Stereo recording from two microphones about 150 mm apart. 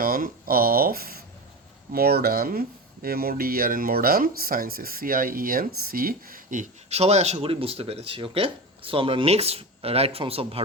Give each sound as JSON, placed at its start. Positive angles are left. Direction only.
{"t": 0.0, "sound": "speech", "side_deg": -70}